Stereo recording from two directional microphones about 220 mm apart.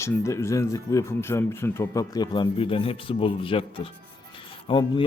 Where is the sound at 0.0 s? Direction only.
15° left (ahead or behind).